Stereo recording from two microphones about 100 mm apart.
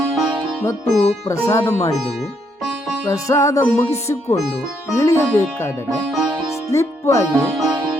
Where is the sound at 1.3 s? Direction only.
30° left (ahead or behind).